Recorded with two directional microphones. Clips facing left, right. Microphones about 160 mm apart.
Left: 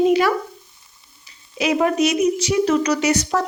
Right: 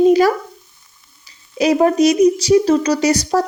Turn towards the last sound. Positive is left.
turn(degrees=-35)  # may be behind; listen again after turning